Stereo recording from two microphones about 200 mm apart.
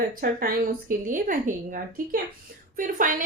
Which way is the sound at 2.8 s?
40° right (ahead or behind).